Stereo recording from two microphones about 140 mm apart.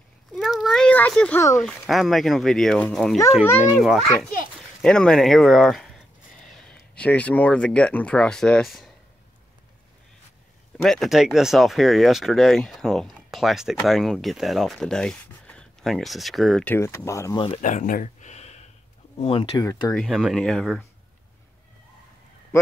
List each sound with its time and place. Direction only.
0.3 s a sound: centre (ahead or behind)
1.9 s speech: centre (ahead or behind)
10.8 s speech: centre (ahead or behind)
16.6 s speech: 15° left (ahead or behind)
17.6 s a sound: 60° left (ahead or behind)
19.1 s speech: 40° left (ahead or behind)
19.5 s speech: 25° left (ahead or behind)
20.1 s speech: centre (ahead or behind)